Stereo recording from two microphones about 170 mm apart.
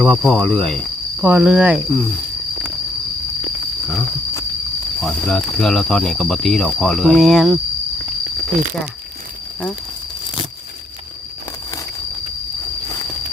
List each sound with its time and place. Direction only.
0.0 s speech: centre (ahead or behind)
3.8 s speech: centre (ahead or behind)